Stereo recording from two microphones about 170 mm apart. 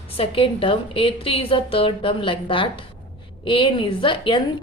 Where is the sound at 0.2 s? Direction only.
30° left (ahead or behind).